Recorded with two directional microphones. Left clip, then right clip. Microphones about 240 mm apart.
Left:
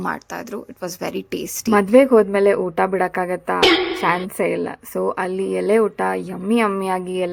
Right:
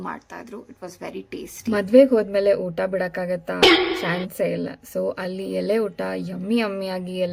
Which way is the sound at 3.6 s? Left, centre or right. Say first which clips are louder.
Even; centre.